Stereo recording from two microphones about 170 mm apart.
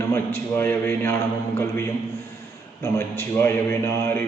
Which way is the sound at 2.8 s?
15° left (ahead or behind).